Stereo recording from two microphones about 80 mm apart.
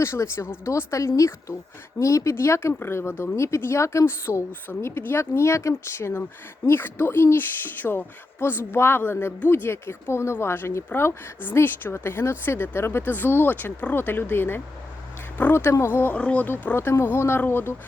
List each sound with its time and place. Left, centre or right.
0.0 s a woman's voice: left
16.1 s speech: centre